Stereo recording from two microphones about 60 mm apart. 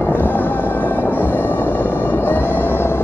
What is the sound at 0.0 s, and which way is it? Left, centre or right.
Music, left.